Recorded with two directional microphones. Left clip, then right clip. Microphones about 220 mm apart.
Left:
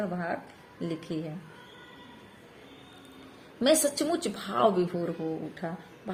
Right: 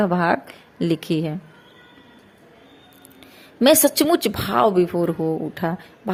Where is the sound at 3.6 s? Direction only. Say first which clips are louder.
Right 9 dB; 35° right (ahead or behind).